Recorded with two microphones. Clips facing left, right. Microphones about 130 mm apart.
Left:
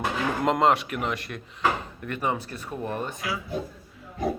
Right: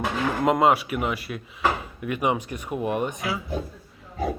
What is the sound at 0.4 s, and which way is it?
Speech, 5° right (ahead or behind).